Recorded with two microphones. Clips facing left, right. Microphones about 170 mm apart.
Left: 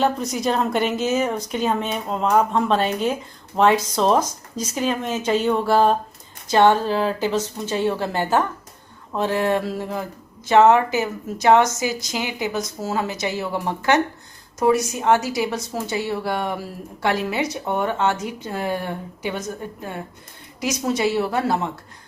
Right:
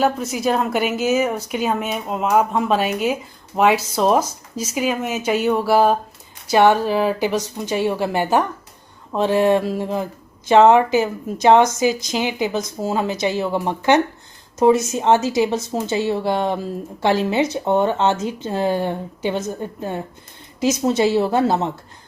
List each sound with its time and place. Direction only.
0.0 s a woman's voice: 5° right (ahead or behind); by 21.7 s 25° right (ahead or behind)